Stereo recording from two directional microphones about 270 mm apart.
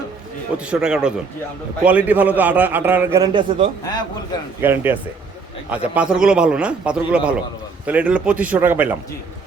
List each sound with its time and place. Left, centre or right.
0.5 s a man's voice: centre
3.8 s a man's voice: centre
4.6 s a man's voice: centre